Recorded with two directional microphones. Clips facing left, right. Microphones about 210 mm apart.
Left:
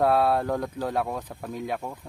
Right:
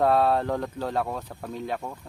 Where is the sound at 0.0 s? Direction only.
10° left (ahead or behind).